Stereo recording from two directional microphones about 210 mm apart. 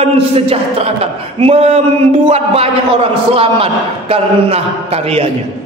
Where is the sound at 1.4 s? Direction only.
30° right (ahead or behind).